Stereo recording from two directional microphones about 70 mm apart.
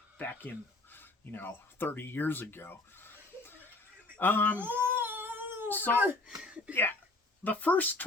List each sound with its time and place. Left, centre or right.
0.2 s speech: left
4.5 s a sound: right
5.6 s a child's voice: left
6.2 s speech: centre
7.4 s speech: left